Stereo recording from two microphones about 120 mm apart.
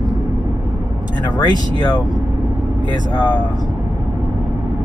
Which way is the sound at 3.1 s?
40° left (ahead or behind).